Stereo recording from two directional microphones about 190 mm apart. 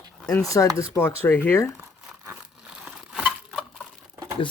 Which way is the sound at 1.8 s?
10° right (ahead or behind).